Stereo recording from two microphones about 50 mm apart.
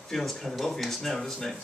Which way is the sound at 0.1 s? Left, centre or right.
Centre.